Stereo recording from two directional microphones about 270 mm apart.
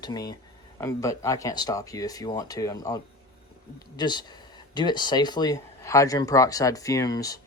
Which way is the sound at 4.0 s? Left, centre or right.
Centre.